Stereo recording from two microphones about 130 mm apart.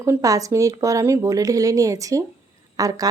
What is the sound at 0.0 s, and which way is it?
Speech, 25° right (ahead or behind).